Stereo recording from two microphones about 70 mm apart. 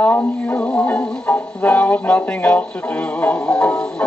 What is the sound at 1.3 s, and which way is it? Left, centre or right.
Speech, left.